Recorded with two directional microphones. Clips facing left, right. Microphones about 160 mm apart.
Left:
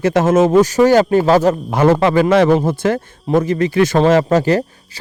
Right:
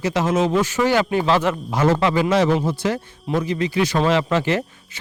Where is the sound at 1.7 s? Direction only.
55° left (ahead or behind).